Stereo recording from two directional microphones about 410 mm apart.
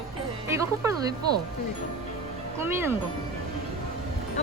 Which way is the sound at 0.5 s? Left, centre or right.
Centre.